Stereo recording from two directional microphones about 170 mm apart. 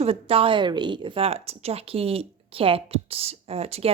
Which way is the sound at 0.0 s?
35° right (ahead or behind).